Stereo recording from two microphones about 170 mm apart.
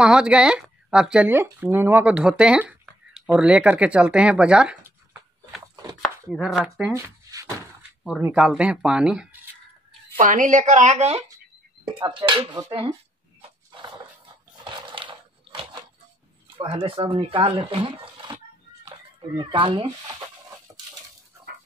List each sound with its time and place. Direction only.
0.0 s speech: 5° right (ahead or behind)
6.0 s chopping: centre (ahead or behind)
6.9 s shuffling cards: 20° right (ahead or behind)
8.2 s speech: 5° right (ahead or behind)
10.1 s speech: 50° right (ahead or behind)
12.0 s speech: 30° right (ahead or behind)
14.6 s a sound: 30° right (ahead or behind)
16.5 s speech: 30° right (ahead or behind)